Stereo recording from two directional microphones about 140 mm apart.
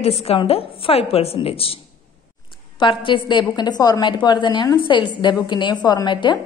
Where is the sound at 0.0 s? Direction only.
45° left (ahead or behind).